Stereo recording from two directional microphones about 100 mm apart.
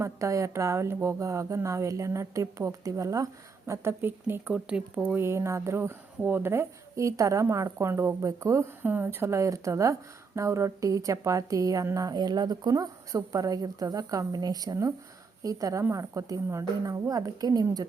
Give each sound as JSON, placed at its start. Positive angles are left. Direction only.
{"t": 0.0, "sound": "a woman's voice", "side_deg": -30}
{"t": 3.7, "sound": "speech", "side_deg": -25}
{"t": 4.5, "sound": "speech", "side_deg": -10}
{"t": 5.1, "sound": "speech", "side_deg": -25}
{"t": 8.8, "sound": "a woman's voice", "side_deg": -20}